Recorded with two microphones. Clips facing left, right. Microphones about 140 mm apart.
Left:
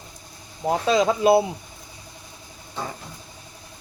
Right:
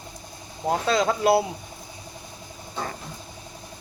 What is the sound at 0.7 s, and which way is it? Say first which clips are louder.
Speech: left 2 dB; 15° left (ahead or behind).